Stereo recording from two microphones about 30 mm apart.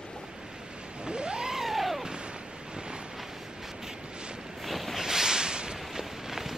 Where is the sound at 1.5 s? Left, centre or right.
Centre.